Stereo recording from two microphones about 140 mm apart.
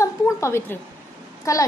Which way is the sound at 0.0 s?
20° left (ahead or behind).